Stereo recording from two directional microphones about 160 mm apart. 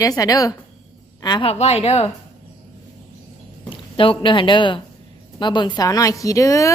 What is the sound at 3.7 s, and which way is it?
Speech, 35° left (ahead or behind).